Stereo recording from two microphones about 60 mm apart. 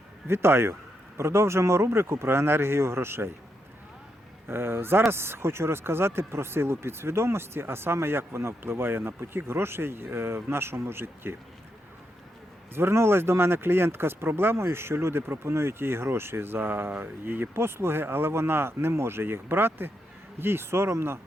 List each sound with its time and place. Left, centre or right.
0.3 s speech: right
4.4 s speech: right
12.7 s speech: right